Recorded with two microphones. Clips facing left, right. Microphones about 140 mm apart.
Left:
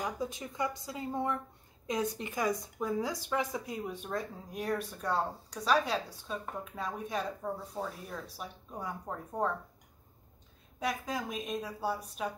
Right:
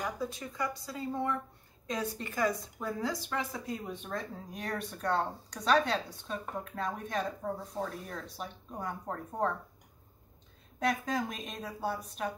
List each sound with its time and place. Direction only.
0.0 s speech: 20° left (ahead or behind)
10.8 s a woman's voice: 5° left (ahead or behind)